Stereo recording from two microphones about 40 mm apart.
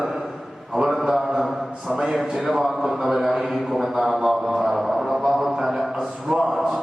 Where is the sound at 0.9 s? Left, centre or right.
Centre.